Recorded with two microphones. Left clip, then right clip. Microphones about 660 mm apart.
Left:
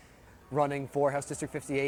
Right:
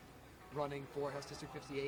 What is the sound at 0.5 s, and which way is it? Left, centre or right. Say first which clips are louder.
Speech: left 13 dB; left.